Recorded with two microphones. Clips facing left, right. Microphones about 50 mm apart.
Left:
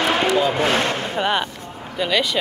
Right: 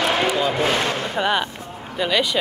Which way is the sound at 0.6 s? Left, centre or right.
Centre.